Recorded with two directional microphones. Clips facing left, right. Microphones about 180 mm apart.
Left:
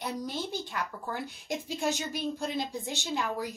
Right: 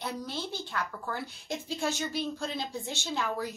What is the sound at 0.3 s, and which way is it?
A woman's voice, 15° left (ahead or behind).